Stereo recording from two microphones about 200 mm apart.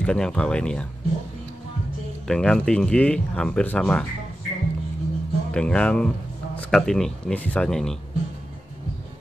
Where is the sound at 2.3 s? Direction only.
5° left (ahead or behind).